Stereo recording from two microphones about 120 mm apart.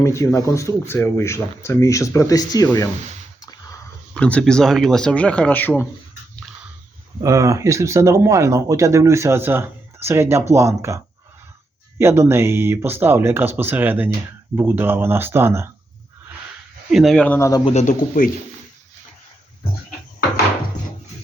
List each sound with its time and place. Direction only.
0.0 s speech: 25° left (ahead or behind)
4.1 s speech: 10° left (ahead or behind)
7.2 s speech: 25° right (ahead or behind)
16.9 s speech: centre (ahead or behind)
17.2 s speech: 20° left (ahead or behind)
17.7 s speech: 70° left (ahead or behind)